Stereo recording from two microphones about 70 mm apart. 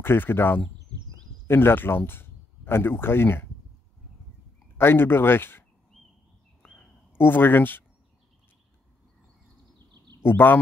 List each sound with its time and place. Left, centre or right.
0.0 s speech: left
4.7 s speech: left
7.2 s speech: left
10.2 s speech: left